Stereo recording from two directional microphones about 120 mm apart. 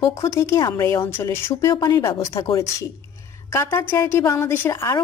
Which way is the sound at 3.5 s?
25° left (ahead or behind).